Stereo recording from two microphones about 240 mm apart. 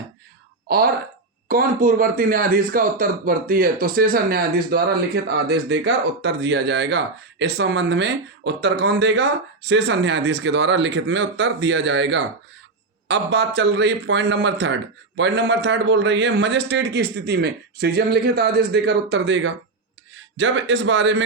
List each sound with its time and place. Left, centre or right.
0.7 s speech: right